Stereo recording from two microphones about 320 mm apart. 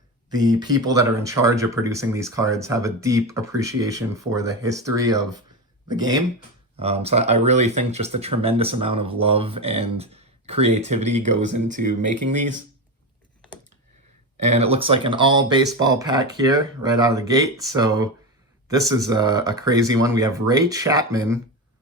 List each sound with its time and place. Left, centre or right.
0.3 s speech: centre
14.3 s speech: right